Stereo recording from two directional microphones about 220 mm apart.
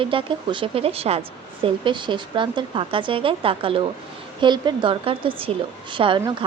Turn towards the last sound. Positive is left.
turn(degrees=-20)  # may be behind; listen again after turning